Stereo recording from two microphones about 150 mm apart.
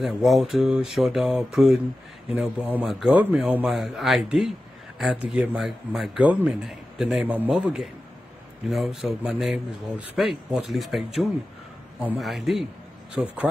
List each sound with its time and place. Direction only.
0.0 s a man's voice: centre (ahead or behind)